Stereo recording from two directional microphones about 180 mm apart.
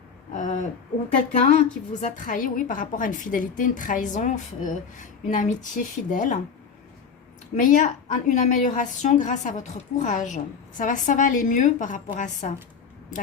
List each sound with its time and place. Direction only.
0.3 s a sound: 45° left (ahead or behind)
1.3 s a woman's voice: 40° left (ahead or behind)
7.5 s a woman's voice: 45° left (ahead or behind)